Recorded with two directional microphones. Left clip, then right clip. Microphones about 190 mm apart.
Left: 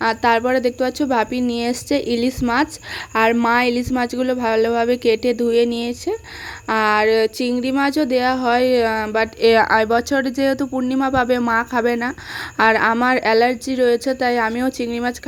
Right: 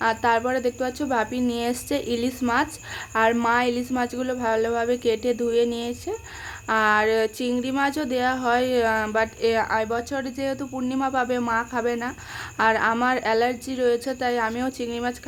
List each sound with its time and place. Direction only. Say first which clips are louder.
0.0 s speech: left 5 dB; 30° left (ahead or behind)